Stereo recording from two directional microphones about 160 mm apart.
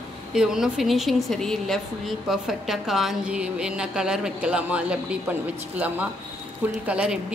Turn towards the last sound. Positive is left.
turn(degrees=-5)  # may be behind; listen again after turning